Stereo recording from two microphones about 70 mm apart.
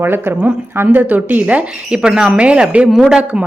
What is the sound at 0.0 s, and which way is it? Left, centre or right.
Speech, right.